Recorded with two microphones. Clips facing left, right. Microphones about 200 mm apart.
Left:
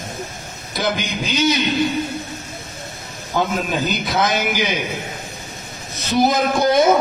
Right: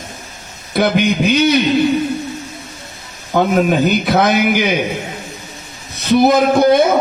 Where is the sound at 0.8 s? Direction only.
60° right (ahead or behind).